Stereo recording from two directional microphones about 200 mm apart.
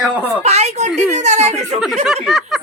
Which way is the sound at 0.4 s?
35° right (ahead or behind).